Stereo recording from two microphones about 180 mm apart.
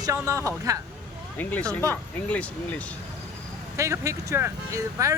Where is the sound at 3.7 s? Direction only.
15° right (ahead or behind).